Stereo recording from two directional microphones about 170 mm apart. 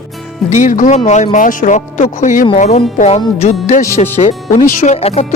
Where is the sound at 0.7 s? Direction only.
50° left (ahead or behind).